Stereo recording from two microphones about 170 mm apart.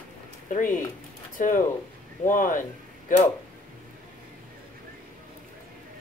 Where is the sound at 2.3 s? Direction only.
50° left (ahead or behind).